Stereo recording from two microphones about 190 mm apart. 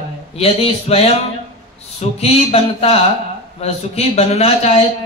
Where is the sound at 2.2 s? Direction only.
30° left (ahead or behind).